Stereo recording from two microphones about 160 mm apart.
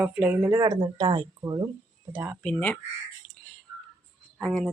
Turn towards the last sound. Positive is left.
turn(degrees=0)  # may be behind; listen again after turning